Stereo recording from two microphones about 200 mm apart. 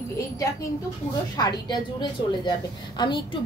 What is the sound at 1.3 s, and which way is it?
A woman's voice, 20° left (ahead or behind).